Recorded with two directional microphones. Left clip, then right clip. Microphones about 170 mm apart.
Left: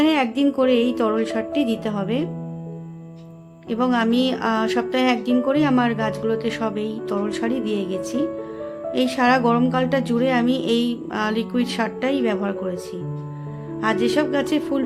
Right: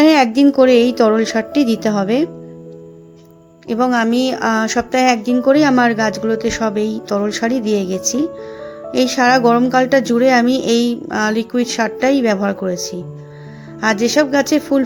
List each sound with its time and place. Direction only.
0.0 s a woman's voice: 35° right (ahead or behind)
3.7 s a woman's voice: 25° right (ahead or behind)